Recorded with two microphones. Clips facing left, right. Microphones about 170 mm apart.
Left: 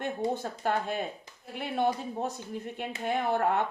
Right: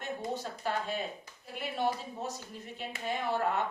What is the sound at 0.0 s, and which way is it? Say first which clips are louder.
A woman's voice: left 5 dB; 55° left (ahead or behind).